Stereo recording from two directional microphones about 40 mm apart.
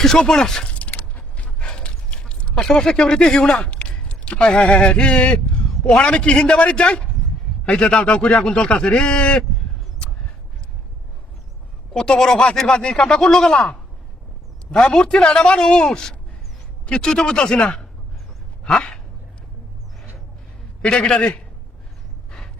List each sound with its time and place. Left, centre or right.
0.2 s speech: centre
0.7 s a sound: left
2.6 s a man's voice: centre
11.9 s a man's voice: centre
18.6 s dog: left
20.8 s a man's voice: left